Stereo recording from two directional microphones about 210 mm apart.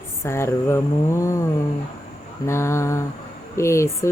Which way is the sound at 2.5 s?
10° left (ahead or behind).